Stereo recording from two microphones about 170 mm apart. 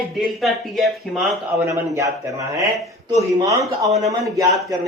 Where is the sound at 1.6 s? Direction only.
20° right (ahead or behind).